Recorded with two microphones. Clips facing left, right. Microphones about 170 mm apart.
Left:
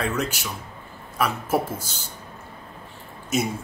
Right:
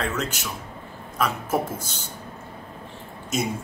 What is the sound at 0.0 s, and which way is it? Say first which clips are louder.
Speech: left 2 dB; 10° left (ahead or behind).